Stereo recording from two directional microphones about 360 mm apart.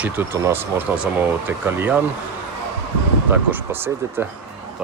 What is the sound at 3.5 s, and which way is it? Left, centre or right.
Speech, centre.